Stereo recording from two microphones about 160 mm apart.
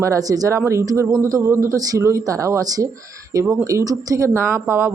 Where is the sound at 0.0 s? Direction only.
20° right (ahead or behind).